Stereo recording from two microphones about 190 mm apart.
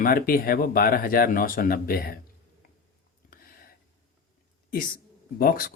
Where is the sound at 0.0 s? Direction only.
50° left (ahead or behind).